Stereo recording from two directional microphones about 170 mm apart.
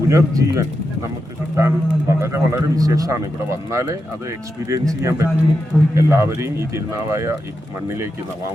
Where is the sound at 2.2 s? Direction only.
15° right (ahead or behind).